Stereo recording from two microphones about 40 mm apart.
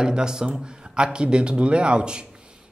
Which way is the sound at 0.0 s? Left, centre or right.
Centre.